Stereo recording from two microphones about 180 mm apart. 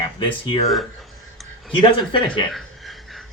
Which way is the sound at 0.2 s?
25° left (ahead or behind).